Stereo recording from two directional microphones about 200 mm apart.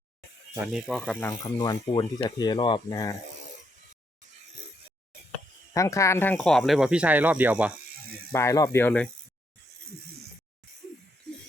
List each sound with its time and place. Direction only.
0.5 s speech: 5° right (ahead or behind)
1.3 s speech: 20° left (ahead or behind)
5.7 s speech: 15° left (ahead or behind); by 7.7 s 10° right (ahead or behind)
8.3 s speech: 15° left (ahead or behind)